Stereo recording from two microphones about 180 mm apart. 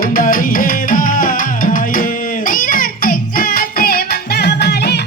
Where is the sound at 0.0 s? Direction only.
50° left (ahead or behind).